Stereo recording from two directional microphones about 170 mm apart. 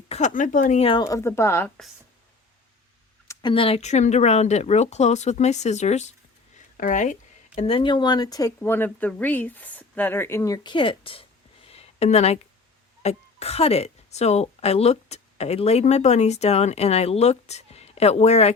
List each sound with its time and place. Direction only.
0.1 s speech: 45° left (ahead or behind)
1.0 s speech: 15° left (ahead or behind)
3.2 s speech: 30° left (ahead or behind)
11.7 s a sound: 40° left (ahead or behind)
13.0 s speech: 40° left (ahead or behind)